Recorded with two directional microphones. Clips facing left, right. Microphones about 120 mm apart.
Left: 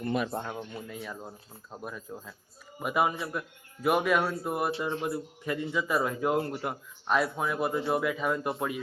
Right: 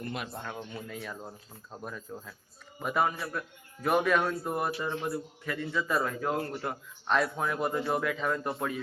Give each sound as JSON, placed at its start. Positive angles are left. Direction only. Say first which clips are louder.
{"t": 0.5, "sound": "speech", "louder": "left 1 dB", "side_deg": 5}